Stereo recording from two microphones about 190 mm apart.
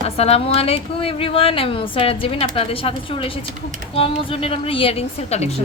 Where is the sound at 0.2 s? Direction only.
30° left (ahead or behind).